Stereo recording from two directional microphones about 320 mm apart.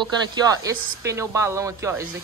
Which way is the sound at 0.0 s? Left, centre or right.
Centre.